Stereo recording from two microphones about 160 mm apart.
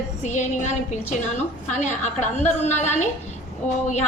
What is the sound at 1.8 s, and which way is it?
Speech, 45° left (ahead or behind).